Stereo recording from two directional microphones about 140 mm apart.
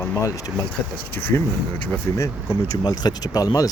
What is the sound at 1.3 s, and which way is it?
Speech, 15° left (ahead or behind).